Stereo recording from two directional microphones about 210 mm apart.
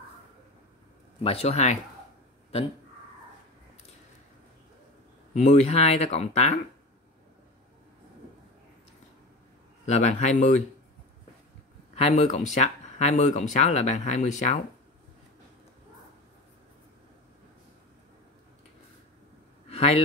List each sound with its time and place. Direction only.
1.2 s speech: 30° left (ahead or behind)
5.3 s speech: 30° left (ahead or behind)
9.8 s speech: 35° left (ahead or behind)
11.9 s speech: 30° left (ahead or behind)
19.7 s a sound: 30° left (ahead or behind)